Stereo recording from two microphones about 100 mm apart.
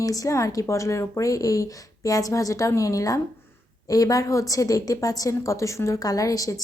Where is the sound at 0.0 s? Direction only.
35° left (ahead or behind).